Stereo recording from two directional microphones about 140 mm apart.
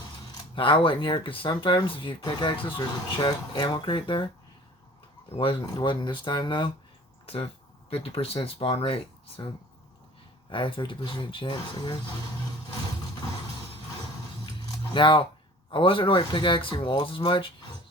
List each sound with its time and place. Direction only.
0.5 s speech: 40° left (ahead or behind)
5.6 s speech: 35° left (ahead or behind)
7.9 s speech: 45° left (ahead or behind)
10.5 s speech: 35° left (ahead or behind)
14.9 s speech: 35° left (ahead or behind)